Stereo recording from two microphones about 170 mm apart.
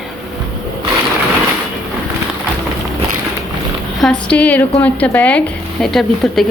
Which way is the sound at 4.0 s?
5° left (ahead or behind).